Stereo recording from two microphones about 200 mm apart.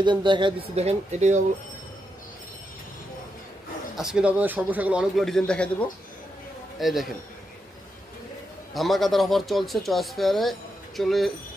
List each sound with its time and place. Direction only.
0.0 s speech: 25° right (ahead or behind)
3.9 s a man's voice: 5° right (ahead or behind)
8.7 s a man's voice: centre (ahead or behind)